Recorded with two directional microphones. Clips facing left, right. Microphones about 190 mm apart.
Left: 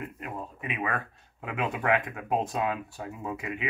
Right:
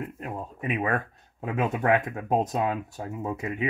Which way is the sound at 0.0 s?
35° right (ahead or behind).